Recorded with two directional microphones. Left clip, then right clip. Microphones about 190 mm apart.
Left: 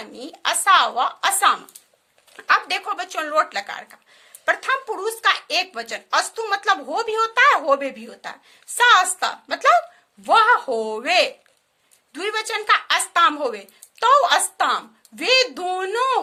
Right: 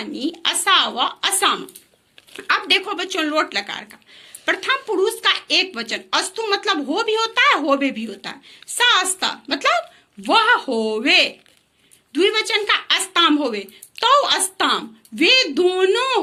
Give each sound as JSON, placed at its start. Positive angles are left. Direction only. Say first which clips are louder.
{"t": 0.0, "sound": "a woman's voice", "louder": "right 3 dB", "side_deg": 40}